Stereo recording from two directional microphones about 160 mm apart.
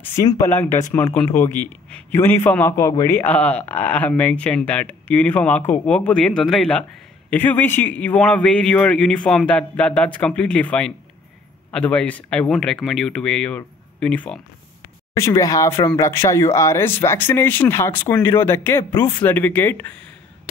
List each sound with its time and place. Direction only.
0.0 s speech: 15° left (ahead or behind)
15.1 s speech: 20° left (ahead or behind)